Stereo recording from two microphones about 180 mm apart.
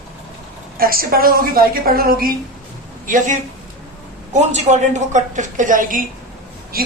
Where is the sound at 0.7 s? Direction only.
55° right (ahead or behind).